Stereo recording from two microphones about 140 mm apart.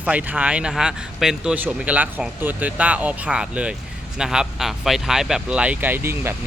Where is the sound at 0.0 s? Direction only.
10° right (ahead or behind).